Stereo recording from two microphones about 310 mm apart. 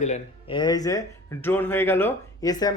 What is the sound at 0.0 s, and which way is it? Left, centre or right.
Speech, centre.